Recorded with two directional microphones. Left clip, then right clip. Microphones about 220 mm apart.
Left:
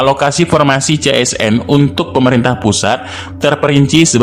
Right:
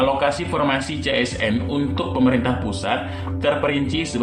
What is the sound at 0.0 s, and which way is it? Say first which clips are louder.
A man's voice: left 8 dB; 55° left (ahead or behind).